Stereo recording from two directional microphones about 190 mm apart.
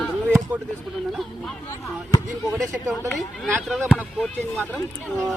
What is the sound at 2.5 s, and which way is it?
Speech, 15° right (ahead or behind).